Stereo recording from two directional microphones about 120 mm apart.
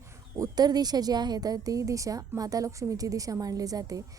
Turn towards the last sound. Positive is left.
turn(degrees=-30)  # may be behind; listen again after turning